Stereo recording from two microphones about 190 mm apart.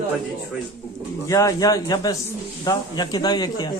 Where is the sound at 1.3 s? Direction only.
20° left (ahead or behind).